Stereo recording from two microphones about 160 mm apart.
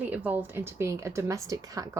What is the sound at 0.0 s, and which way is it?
A woman's voice, 10° right (ahead or behind).